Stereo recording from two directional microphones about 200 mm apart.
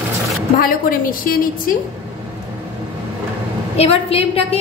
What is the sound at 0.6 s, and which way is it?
A woman's voice, 45° left (ahead or behind).